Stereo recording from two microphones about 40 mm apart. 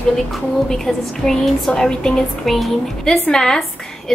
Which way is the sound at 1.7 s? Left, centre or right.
Centre.